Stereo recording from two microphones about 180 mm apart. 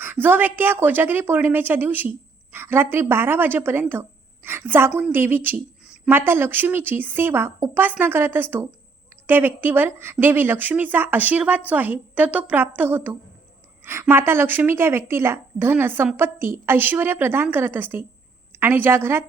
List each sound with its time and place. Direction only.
0.0 s a woman's voice: 10° right (ahead or behind)